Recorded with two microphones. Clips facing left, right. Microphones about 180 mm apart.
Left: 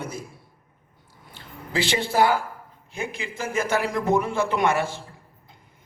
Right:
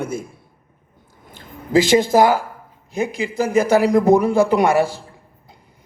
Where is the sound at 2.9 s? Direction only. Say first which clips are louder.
Right 11 dB; 40° right (ahead or behind).